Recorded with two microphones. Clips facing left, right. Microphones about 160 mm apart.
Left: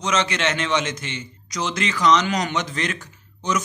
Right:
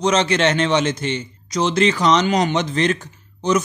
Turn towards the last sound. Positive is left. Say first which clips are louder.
# right 6 dB
turn(degrees=-30)  # may be behind; listen again after turning